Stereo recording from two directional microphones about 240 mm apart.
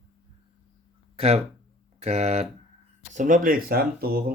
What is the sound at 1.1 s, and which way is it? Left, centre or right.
Speech, right.